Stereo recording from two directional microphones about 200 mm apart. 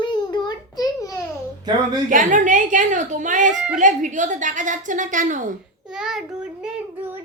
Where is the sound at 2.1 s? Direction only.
40° right (ahead or behind).